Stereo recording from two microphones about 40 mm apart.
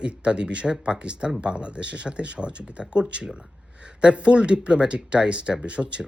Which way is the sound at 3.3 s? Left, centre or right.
Right.